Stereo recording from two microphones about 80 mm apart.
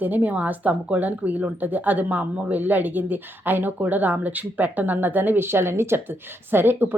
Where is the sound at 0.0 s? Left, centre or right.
Right.